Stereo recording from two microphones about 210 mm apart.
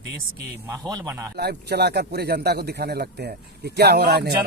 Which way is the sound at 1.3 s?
50° right (ahead or behind).